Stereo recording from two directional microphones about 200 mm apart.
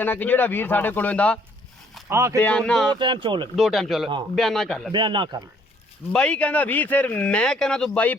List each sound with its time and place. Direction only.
0.0 s speech: 10° left (ahead or behind)
2.0 s speech: 15° right (ahead or behind)
2.4 s speech: 5° left (ahead or behind)
2.9 s speech: 25° right (ahead or behind)
3.5 s speech: centre (ahead or behind)
4.9 s speech: 25° right (ahead or behind)
6.1 s speech: 5° left (ahead or behind)